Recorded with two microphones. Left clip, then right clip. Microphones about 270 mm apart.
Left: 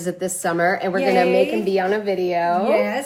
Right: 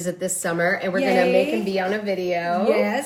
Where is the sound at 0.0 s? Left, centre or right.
Centre.